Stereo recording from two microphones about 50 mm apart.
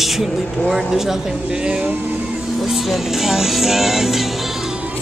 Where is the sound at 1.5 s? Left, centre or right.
Centre.